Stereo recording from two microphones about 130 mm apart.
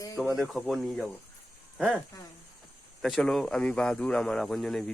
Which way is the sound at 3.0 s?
5° left (ahead or behind).